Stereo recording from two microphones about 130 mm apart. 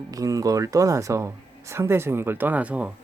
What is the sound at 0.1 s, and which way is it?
Speech, 25° right (ahead or behind).